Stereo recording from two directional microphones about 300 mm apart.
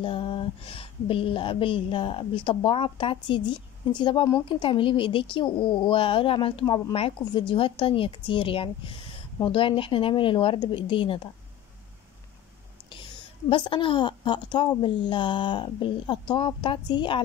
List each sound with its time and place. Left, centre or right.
0.0 s speech: centre
13.5 s speech: centre